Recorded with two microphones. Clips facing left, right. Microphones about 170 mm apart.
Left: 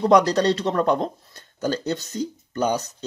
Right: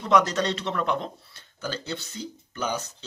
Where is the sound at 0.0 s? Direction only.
35° left (ahead or behind).